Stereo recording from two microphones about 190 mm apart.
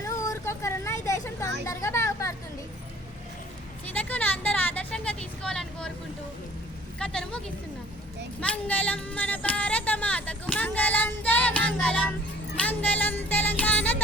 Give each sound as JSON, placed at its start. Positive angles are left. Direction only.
{"t": 0.0, "sound": "vehicle", "side_deg": 15}
{"t": 3.9, "sound": "vehicle", "side_deg": 10}
{"t": 7.0, "sound": "a woman's voice", "side_deg": 5}
{"t": 12.5, "sound": "music", "side_deg": 10}